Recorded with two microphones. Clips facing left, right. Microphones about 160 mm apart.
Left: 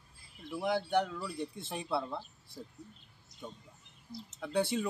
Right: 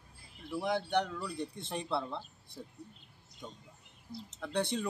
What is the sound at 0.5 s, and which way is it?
Speech, centre (ahead or behind).